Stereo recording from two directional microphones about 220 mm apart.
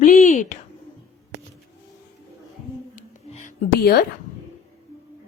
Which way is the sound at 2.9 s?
35° left (ahead or behind).